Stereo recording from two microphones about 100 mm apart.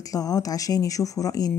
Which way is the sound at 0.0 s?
35° left (ahead or behind).